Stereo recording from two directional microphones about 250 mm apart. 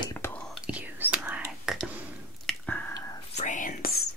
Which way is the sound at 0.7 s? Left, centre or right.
Centre.